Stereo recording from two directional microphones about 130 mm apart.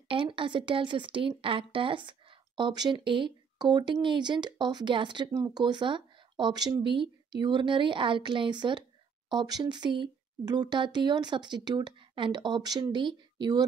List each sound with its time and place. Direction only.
0.1 s speech: 40° right (ahead or behind)